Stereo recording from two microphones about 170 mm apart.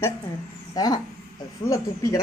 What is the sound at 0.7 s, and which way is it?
Speech, 25° left (ahead or behind).